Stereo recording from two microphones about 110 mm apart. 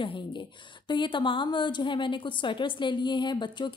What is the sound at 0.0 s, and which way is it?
A woman's voice, 50° left (ahead or behind).